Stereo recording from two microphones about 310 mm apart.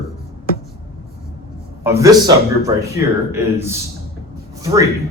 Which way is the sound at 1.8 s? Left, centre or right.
Centre.